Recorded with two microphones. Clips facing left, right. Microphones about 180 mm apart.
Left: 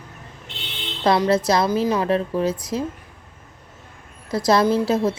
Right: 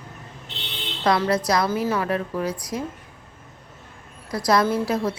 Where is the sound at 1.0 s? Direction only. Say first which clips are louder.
Left 3 dB; 25° left (ahead or behind).